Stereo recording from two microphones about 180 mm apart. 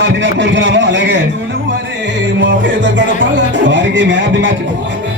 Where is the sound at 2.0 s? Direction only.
90° right.